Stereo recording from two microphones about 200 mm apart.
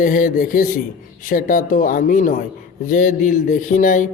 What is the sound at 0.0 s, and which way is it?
A man's voice, 40° left (ahead or behind).